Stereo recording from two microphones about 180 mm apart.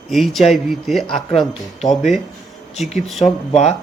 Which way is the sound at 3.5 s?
40° left (ahead or behind).